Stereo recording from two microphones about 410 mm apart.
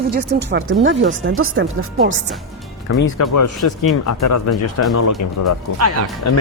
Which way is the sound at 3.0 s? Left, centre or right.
Left.